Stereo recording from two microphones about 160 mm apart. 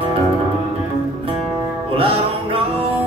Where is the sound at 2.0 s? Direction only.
35° right (ahead or behind).